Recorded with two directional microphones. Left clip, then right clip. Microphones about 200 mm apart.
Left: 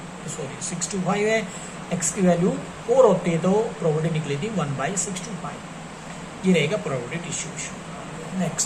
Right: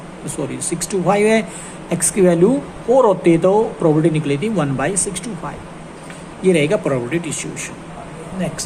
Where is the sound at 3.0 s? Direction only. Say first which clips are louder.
Right 3 dB; 50° right (ahead or behind).